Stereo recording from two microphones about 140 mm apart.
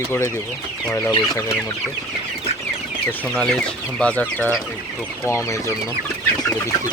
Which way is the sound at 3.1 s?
5° left (ahead or behind).